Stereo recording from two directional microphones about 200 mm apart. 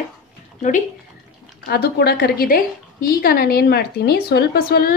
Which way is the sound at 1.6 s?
55° left (ahead or behind).